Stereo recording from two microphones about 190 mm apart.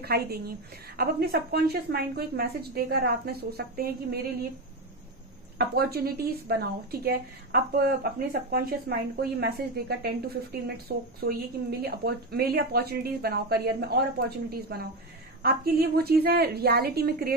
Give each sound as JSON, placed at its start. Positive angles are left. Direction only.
{"t": 0.0, "sound": "a woman's voice", "side_deg": -55}
{"t": 5.6, "sound": "a woman's voice", "side_deg": -55}